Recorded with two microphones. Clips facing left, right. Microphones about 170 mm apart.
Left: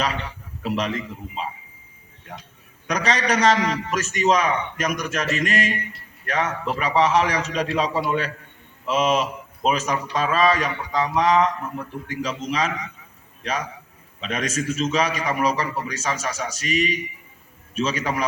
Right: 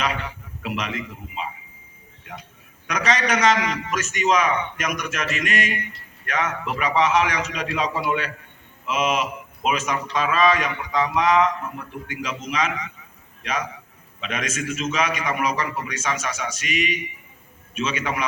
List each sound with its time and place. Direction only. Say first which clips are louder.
0.6 s a man's voice: left 4 dB; 35° left (ahead or behind)
2.8 s a man's voice: even; 35° left (ahead or behind)